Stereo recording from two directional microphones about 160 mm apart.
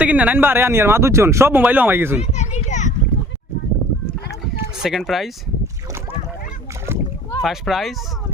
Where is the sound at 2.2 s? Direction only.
45° left (ahead or behind).